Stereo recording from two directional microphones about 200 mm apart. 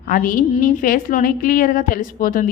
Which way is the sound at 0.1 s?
45° left (ahead or behind).